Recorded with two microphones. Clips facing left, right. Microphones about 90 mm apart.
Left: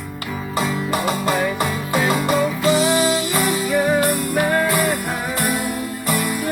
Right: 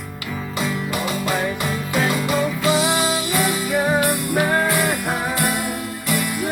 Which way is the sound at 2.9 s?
35° left (ahead or behind).